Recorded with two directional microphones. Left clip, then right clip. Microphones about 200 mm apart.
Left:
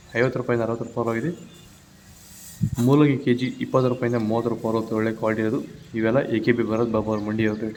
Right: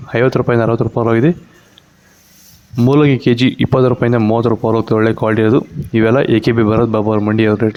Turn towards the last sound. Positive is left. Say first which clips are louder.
# right 12 dB
turn(degrees=-45)  # may be behind; listen again after turning